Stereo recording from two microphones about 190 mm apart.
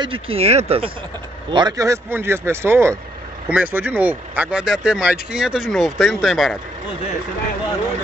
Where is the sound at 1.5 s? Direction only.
20° right (ahead or behind); by 6.5 s centre (ahead or behind).